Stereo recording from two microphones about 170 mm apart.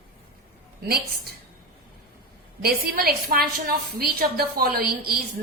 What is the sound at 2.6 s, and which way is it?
A woman's voice, 60° right (ahead or behind).